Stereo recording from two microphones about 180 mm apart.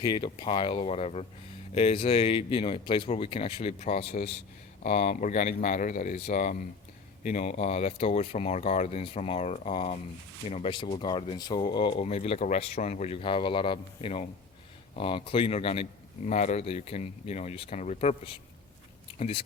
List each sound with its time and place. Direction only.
0.0 s speech: 25° left (ahead or behind)